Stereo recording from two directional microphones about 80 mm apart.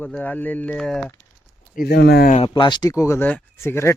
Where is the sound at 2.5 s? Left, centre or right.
Left.